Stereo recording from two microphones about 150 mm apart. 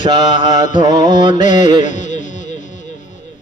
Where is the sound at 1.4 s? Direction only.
55° left (ahead or behind).